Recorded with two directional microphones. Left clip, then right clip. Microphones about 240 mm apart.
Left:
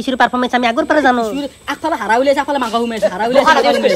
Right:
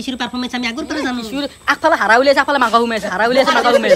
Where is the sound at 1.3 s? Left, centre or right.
Centre.